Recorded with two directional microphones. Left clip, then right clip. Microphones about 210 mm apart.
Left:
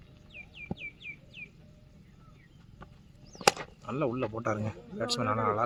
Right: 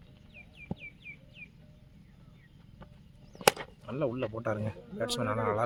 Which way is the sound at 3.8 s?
10° left (ahead or behind).